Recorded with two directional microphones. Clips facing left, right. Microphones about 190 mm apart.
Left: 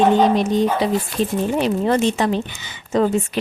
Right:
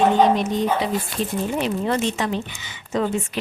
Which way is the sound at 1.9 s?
35° left (ahead or behind).